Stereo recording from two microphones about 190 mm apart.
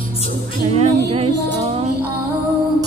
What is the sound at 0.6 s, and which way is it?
Music, 35° right (ahead or behind).